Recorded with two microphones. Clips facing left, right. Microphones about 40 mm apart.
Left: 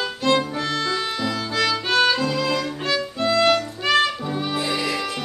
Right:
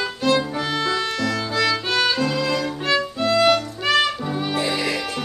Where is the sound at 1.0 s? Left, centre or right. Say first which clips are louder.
Right 2 dB; centre.